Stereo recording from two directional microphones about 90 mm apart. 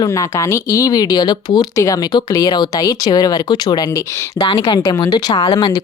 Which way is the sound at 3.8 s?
30° left (ahead or behind).